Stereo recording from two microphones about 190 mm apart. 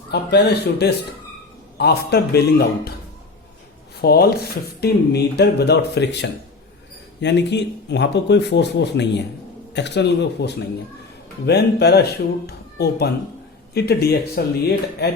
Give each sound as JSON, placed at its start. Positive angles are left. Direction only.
{"t": 0.1, "sound": "speech", "side_deg": 60}
{"t": 3.9, "sound": "speech", "side_deg": 55}